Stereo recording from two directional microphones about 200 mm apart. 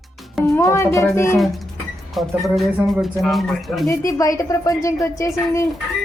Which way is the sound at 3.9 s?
15° left (ahead or behind).